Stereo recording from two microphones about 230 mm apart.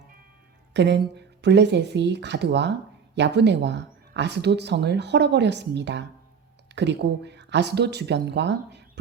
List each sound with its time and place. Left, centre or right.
0.7 s speech: right